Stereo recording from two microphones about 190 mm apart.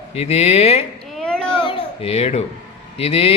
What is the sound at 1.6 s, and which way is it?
Baby cry, 30° left (ahead or behind).